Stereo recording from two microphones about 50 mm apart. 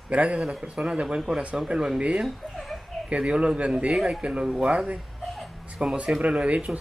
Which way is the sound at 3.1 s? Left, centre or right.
Right.